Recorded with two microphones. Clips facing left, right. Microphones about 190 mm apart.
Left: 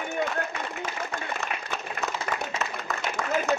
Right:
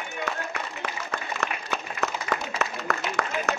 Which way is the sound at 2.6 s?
70° right (ahead or behind).